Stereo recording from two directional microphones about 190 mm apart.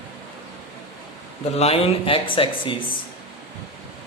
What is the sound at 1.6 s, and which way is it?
Speech, 30° left (ahead or behind).